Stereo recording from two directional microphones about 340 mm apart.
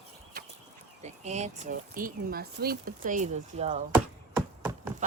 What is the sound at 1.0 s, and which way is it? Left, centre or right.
Speech, centre.